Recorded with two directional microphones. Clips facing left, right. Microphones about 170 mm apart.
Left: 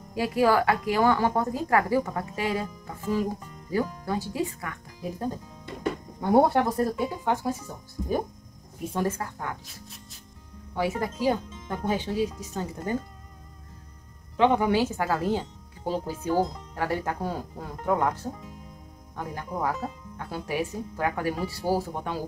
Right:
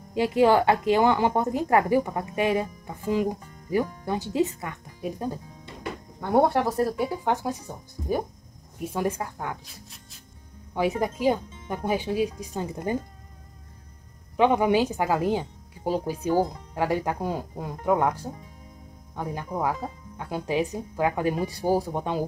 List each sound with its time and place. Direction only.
0.1 s a woman's voice: 25° right (ahead or behind)
6.2 s speech: 5° left (ahead or behind); by 9.6 s 15° right (ahead or behind)
10.7 s speech: 20° right (ahead or behind)
14.3 s speech: 15° right (ahead or behind)